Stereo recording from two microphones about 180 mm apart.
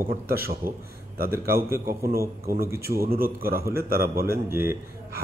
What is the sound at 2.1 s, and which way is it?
A man's voice, 55° right (ahead or behind).